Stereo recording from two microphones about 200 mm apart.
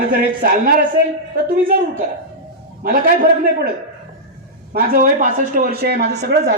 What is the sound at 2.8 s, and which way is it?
Speech, 45° right (ahead or behind).